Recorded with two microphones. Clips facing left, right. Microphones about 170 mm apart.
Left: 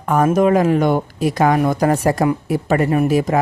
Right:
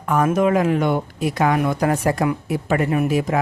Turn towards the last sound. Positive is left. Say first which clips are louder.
# left 4 dB
turn(degrees=40)  # may be behind; listen again after turning